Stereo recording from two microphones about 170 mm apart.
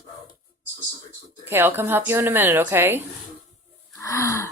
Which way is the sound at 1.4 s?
10° right (ahead or behind).